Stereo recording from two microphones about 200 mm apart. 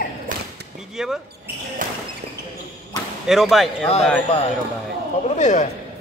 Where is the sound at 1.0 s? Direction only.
5° right (ahead or behind).